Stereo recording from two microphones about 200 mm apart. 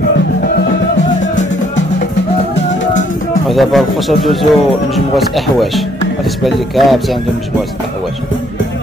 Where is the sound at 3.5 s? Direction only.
Centre (ahead or behind).